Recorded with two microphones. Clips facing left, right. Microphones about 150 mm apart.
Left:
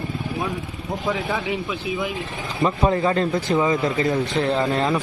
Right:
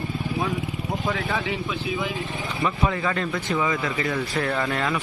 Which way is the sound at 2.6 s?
30° left (ahead or behind).